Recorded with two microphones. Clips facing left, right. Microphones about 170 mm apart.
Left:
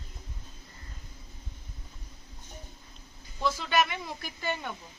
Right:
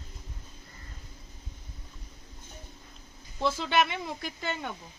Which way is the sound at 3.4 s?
25° right (ahead or behind).